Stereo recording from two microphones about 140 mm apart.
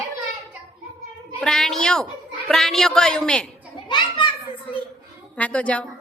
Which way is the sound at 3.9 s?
35° left (ahead or behind).